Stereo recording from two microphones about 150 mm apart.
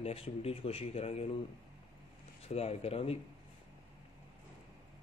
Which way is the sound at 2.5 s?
45° left (ahead or behind).